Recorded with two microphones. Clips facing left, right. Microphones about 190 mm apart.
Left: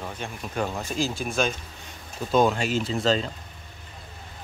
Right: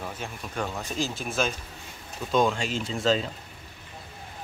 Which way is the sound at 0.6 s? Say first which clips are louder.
Left 3 dB; 35° left (ahead or behind).